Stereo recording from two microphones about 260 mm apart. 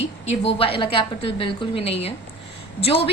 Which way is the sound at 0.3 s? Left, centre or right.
Left.